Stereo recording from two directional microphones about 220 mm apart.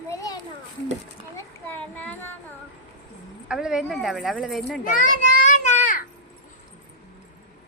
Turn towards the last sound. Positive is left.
turn(degrees=35)  # may be behind; listen again after turning